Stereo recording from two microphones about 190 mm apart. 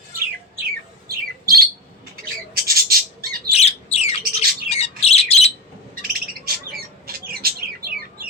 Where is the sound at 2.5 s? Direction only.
50° right (ahead or behind).